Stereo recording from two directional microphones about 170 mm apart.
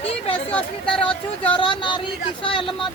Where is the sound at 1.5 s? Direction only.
30° left (ahead or behind).